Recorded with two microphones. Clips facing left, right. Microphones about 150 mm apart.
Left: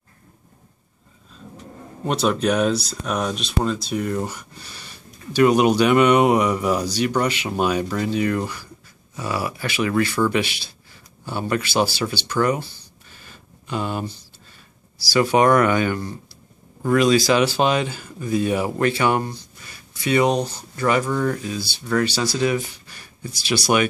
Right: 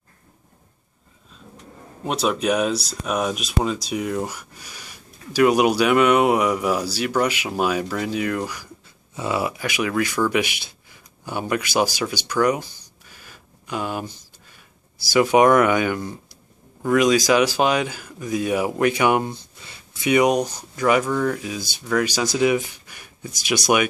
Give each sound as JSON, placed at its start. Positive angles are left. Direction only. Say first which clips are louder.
{"t": 2.0, "sound": "speech", "louder": "left 1 dB", "side_deg": -5}
{"t": 9.1, "sound": "speech", "louder": "right 2 dB", "side_deg": -20}
{"t": 13.1, "sound": "a sound", "louder": "left 1 dB", "side_deg": -10}
{"t": 15.1, "sound": "speech", "louder": "right 1 dB", "side_deg": -10}
{"t": 21.4, "sound": "speech", "louder": "left 2 dB", "side_deg": -15}